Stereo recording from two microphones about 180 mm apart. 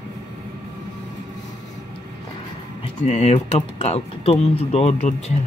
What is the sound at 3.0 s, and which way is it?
Speech, 35° left (ahead or behind).